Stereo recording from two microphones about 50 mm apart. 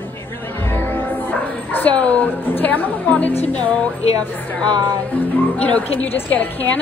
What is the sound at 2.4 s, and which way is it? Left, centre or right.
A woman's voice, left.